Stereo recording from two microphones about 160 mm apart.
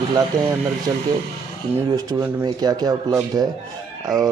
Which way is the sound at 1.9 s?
20° right (ahead or behind).